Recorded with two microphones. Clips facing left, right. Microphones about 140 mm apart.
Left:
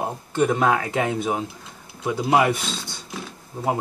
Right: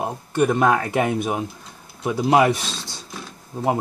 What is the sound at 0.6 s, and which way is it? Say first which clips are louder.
Speech: right 2 dB; 20° right (ahead or behind).